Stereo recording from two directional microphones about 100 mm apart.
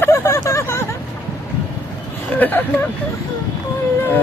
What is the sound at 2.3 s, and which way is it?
Speech, 20° left (ahead or behind).